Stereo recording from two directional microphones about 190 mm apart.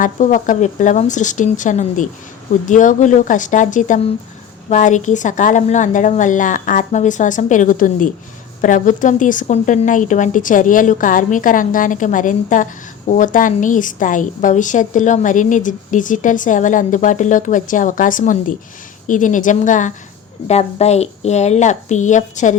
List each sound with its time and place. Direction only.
0.0 s a woman's voice: 45° left (ahead or behind)